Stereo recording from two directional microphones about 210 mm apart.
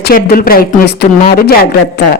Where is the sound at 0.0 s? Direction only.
45° left (ahead or behind).